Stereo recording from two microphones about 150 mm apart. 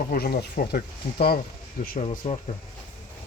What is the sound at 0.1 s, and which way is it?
Speech, 75° left (ahead or behind).